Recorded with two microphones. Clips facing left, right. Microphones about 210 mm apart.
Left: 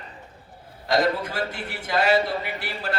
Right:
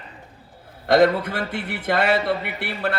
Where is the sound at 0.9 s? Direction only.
60° right (ahead or behind).